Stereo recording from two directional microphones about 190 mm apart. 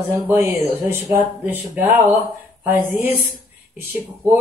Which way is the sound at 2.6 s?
10° right (ahead or behind).